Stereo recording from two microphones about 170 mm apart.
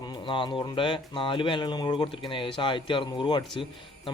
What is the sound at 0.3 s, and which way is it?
A man's voice, 30° left (ahead or behind).